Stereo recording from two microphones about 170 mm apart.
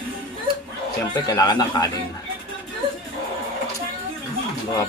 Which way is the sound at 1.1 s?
20° left (ahead or behind).